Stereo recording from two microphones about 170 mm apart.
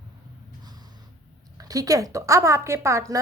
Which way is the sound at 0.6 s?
25° right (ahead or behind).